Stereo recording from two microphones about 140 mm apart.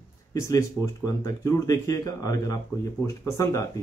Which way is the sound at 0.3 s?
20° left (ahead or behind).